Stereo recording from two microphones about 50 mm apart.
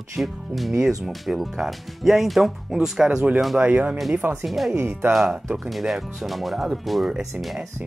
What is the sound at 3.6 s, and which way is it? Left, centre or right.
Speech, right.